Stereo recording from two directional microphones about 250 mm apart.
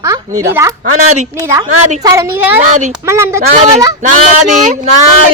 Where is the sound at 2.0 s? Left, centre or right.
Centre.